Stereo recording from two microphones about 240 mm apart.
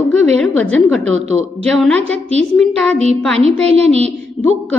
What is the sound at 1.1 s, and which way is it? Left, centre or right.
Speech, right.